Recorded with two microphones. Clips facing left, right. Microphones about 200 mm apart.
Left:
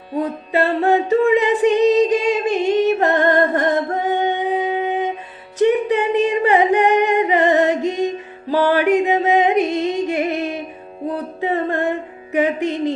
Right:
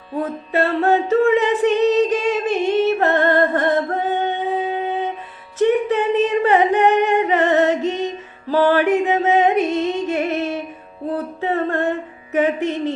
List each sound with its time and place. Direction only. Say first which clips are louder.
0.2 s a capella: left 1 dB; 15° left (ahead or behind)
5.5 s singing: left 1 dB; 15° left (ahead or behind)
8.7 s music: left 1 dB; 15° left (ahead or behind)
11.1 s a sound: even; 15° left (ahead or behind)
12.3 s speech: even; 15° left (ahead or behind)